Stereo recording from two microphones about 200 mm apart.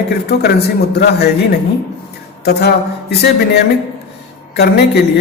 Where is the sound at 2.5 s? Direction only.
55° left (ahead or behind).